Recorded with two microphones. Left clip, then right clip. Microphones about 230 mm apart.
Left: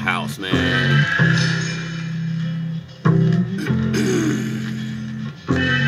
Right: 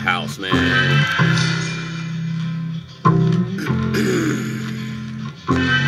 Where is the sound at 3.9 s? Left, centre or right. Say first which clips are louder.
Right 1 dB; centre.